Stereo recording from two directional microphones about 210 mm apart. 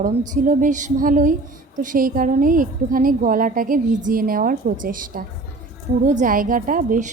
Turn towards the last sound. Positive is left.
turn(degrees=-40)  # may be behind; listen again after turning